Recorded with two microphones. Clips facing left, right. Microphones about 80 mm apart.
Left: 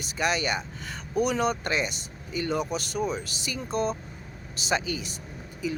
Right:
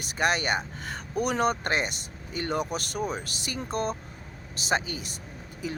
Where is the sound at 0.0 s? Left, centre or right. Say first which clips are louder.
Right 1 dB; right.